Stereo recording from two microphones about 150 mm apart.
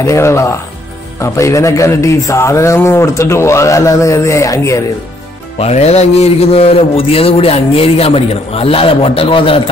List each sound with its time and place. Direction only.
0.0 s a man's voice: 20° left (ahead or behind)
5.6 s a man's voice: 45° left (ahead or behind)